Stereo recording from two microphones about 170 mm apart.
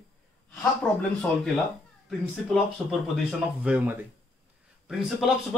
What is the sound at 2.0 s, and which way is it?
Speech, centre (ahead or behind).